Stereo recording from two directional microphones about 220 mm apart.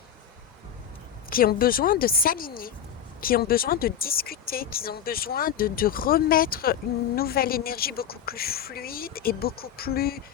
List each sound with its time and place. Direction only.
1.3 s speech: 40° left (ahead or behind)